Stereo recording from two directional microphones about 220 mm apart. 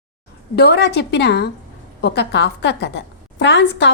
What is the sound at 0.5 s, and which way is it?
A woman's voice, 50° left (ahead or behind).